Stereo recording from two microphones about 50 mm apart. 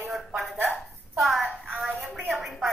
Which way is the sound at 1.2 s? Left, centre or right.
Centre.